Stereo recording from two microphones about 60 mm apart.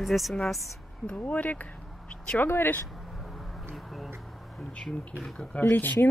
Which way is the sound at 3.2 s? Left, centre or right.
Centre.